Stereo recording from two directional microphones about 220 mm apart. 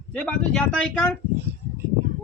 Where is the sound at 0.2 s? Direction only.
5° left (ahead or behind).